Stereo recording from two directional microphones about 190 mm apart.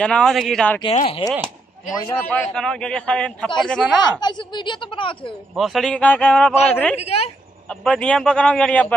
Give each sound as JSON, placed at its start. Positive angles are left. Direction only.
{"t": 0.0, "sound": "a man's voice", "side_deg": 5}
{"t": 0.8, "sound": "speech", "side_deg": 30}
{"t": 1.9, "sound": "a man's voice", "side_deg": 15}
{"t": 4.2, "sound": "speech", "side_deg": 25}
{"t": 5.6, "sound": "a man's voice", "side_deg": 0}
{"t": 7.0, "sound": "speech", "side_deg": 35}
{"t": 7.8, "sound": "a man's voice", "side_deg": 5}